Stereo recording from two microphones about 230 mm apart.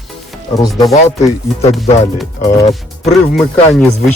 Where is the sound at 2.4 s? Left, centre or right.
Centre.